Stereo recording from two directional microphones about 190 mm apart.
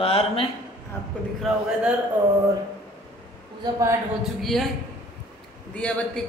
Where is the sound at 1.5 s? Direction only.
Centre (ahead or behind).